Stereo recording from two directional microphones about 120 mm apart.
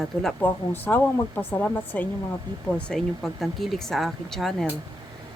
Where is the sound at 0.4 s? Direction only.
15° left (ahead or behind).